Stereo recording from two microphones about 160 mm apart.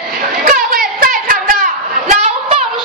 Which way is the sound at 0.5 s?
60° right (ahead or behind).